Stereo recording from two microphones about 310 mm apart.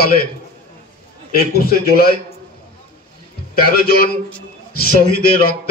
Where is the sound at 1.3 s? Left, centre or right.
Left.